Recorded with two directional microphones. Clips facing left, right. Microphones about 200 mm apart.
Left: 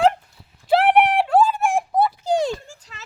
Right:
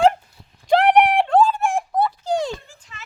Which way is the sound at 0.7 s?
5° left (ahead or behind).